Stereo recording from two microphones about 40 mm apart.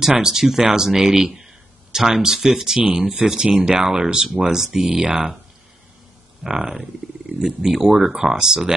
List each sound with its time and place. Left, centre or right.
0.2 s speech: centre
6.4 s speech: centre